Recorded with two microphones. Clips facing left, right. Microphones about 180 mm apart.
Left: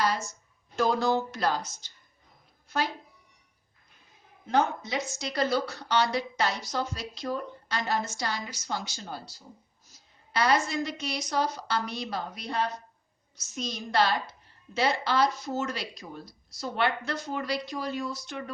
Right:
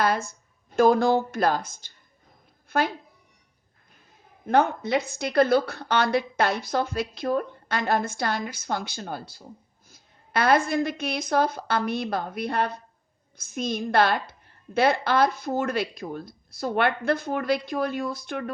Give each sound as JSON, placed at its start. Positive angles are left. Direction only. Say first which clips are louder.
{"t": 0.0, "sound": "a woman's voice", "louder": "right 4 dB", "side_deg": -55}
{"t": 2.6, "sound": "a sound", "louder": "right 5 dB", "side_deg": -55}
{"t": 4.4, "sound": "a woman's voice", "louder": "right 5 dB", "side_deg": -60}